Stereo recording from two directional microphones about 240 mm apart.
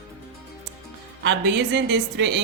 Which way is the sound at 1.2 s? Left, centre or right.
Right.